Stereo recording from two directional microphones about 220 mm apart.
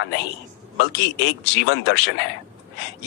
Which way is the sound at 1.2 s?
55° left (ahead or behind).